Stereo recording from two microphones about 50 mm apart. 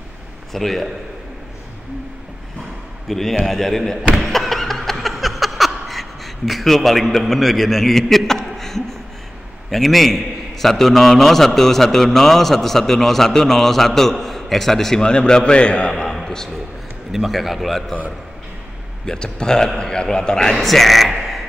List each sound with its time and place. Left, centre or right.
0.5 s a man's voice: centre
3.1 s speech: centre
3.4 s a sound: centre
9.7 s a man's voice: centre
15.0 s a man's voice: centre
15.9 s a sound: centre
17.1 s a man's voice: centre
19.0 s speech: centre